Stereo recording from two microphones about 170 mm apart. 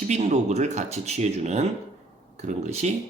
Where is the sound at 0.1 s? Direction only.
40° right (ahead or behind).